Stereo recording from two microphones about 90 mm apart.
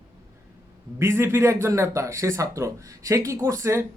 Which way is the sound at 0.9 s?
30° right (ahead or behind).